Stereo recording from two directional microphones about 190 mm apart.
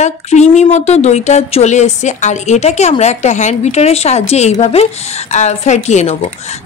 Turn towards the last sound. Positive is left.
turn(degrees=35)  # may be behind; listen again after turning